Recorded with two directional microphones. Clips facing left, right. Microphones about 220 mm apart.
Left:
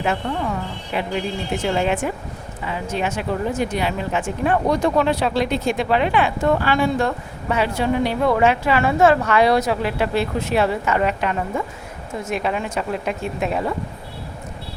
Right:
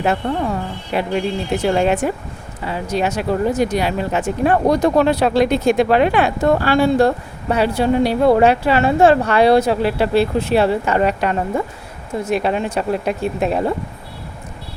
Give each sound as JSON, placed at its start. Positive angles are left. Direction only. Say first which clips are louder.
{"t": 0.0, "sound": "speech", "louder": "right 4 dB", "side_deg": -40}